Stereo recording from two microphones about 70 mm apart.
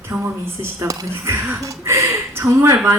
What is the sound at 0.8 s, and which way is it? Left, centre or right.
Speech, right.